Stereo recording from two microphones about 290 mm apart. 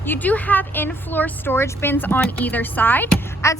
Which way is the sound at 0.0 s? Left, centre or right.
Centre.